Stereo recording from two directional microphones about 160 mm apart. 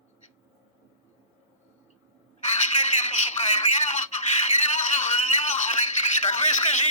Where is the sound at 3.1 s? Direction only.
45° left (ahead or behind).